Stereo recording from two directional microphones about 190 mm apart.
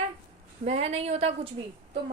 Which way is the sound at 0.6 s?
35° right (ahead or behind).